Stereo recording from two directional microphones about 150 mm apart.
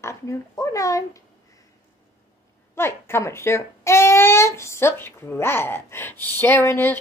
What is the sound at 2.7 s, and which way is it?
A child's voice, 15° left (ahead or behind).